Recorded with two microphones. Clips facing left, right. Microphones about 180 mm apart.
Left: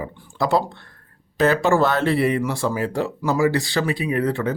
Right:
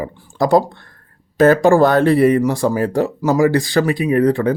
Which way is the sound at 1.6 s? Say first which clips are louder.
Right 7 dB; 45° right (ahead or behind).